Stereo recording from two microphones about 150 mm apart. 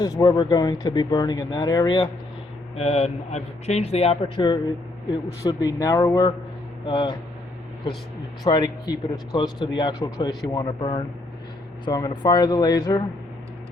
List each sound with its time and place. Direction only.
0.0 s speech: 25° left (ahead or behind)
2.7 s speech: 45° left (ahead or behind)
8.4 s speech: 30° left (ahead or behind)